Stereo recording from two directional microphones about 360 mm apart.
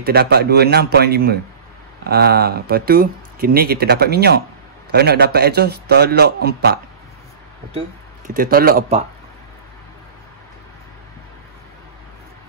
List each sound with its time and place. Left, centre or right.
0.0 s speech: right
8.3 s speech: right